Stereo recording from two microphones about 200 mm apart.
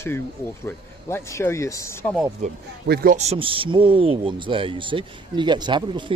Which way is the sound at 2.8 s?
50° right (ahead or behind).